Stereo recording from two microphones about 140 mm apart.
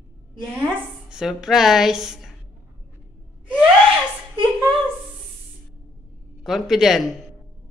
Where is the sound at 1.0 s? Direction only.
5° right (ahead or behind).